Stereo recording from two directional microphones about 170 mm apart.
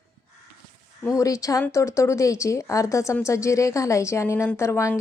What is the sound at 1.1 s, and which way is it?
Speech, 20° left (ahead or behind).